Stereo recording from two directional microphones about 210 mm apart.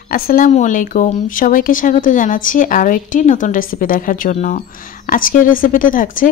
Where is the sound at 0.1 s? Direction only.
45° left (ahead or behind).